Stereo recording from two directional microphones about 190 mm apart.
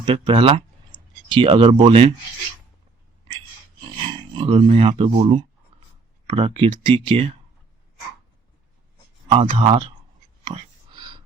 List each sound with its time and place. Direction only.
0.0 s speech: 30° right (ahead or behind)
4.4 s speech: 30° right (ahead or behind)
9.3 s speech: 30° right (ahead or behind)
10.4 s whispering: 25° right (ahead or behind)